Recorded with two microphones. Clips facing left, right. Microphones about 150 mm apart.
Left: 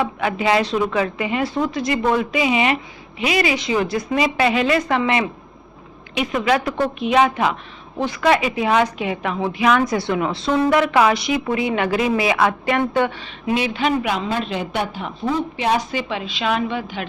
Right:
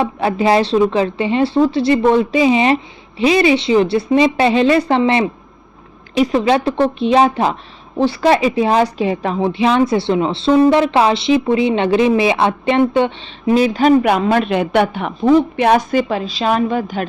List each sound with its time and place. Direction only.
0.0 s a woman's voice: 35° right (ahead or behind)